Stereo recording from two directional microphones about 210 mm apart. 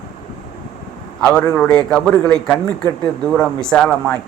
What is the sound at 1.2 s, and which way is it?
A man's voice, 5° left (ahead or behind).